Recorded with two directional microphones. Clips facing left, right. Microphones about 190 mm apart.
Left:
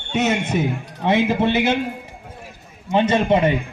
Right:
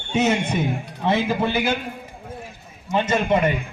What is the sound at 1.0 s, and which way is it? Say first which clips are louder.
Speech: left 3 dB; 20° left (ahead or behind).